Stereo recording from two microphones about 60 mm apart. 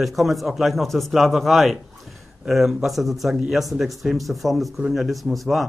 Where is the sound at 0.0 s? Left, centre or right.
Centre.